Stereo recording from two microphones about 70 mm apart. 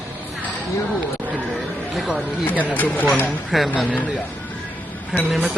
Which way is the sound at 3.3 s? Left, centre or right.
Centre.